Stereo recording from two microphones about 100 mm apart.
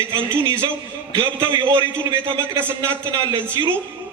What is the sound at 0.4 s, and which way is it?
A man's voice, 30° right (ahead or behind).